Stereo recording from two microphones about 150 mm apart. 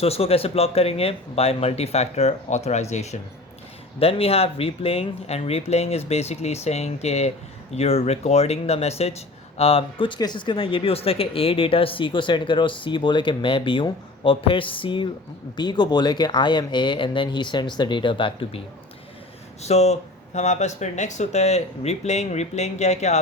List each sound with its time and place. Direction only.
0.0 s speech: 40° left (ahead or behind)
19.6 s speech: 45° left (ahead or behind)